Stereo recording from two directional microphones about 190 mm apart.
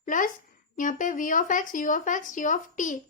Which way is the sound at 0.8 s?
45° left (ahead or behind).